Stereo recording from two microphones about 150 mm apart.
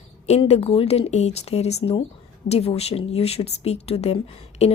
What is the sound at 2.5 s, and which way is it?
Speech, 45° left (ahead or behind).